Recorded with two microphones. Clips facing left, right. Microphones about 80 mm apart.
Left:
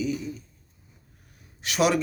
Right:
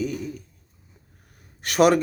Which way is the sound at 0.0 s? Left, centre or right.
Right.